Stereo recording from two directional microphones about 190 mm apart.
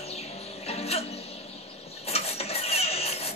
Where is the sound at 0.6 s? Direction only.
35° left (ahead or behind).